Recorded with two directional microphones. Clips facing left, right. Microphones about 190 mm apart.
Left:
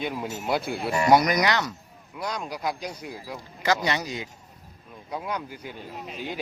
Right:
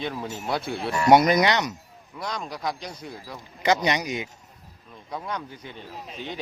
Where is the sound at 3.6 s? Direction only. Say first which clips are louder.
Right 3 dB; 20° right (ahead or behind).